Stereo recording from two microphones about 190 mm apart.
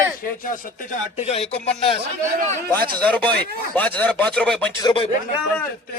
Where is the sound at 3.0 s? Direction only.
5° left (ahead or behind).